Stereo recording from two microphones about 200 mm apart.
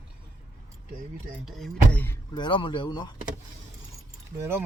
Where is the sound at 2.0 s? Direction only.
20° left (ahead or behind).